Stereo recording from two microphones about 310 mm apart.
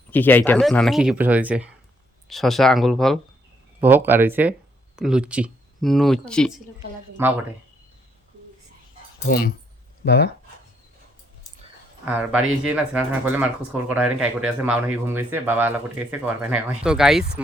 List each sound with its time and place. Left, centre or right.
0.1 s speech: centre
9.1 s speech: left
12.0 s speech: centre